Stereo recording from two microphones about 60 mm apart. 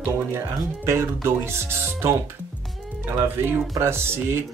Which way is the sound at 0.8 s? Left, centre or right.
Right.